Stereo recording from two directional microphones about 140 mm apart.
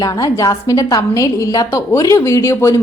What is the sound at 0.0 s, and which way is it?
A woman's voice, 25° left (ahead or behind).